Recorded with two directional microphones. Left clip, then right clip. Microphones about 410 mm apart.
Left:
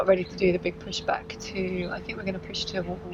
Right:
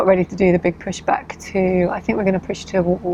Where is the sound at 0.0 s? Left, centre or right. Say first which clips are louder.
Right 7 dB; right.